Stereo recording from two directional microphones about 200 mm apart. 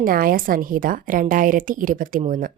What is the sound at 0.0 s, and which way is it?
A woman's voice, 45° right (ahead or behind).